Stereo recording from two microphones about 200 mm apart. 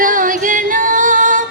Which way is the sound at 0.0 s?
40° right (ahead or behind).